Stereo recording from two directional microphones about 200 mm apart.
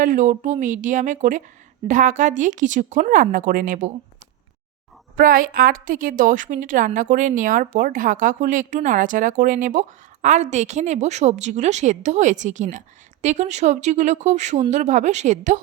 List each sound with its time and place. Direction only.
0.0 s a woman's voice: 40° right (ahead or behind)
5.1 s a woman's voice: 45° right (ahead or behind)